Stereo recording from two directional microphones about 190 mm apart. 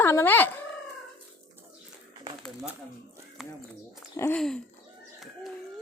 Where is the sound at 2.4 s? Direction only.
5° right (ahead or behind).